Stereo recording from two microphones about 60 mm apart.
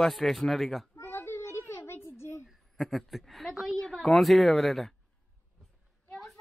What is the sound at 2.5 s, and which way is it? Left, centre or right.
Speech, centre.